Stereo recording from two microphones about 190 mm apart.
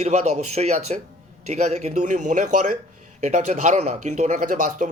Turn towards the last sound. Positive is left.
turn(degrees=-40)  # may be behind; listen again after turning